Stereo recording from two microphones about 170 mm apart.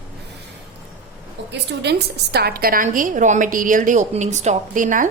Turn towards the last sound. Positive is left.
turn(degrees=-50)  # may be behind; listen again after turning